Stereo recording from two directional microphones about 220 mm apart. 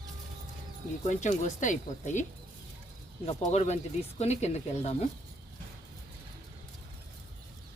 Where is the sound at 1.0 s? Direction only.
30° left (ahead or behind).